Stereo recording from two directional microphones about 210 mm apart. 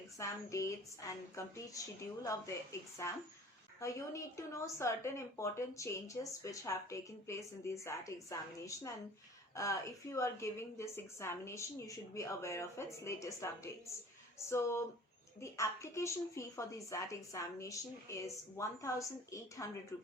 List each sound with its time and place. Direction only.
0.2 s a woman's voice: 15° left (ahead or behind)
3.8 s a woman's voice: 15° left (ahead or behind)